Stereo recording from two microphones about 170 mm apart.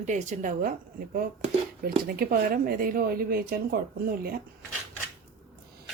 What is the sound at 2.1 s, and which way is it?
Speech, 60° right (ahead or behind).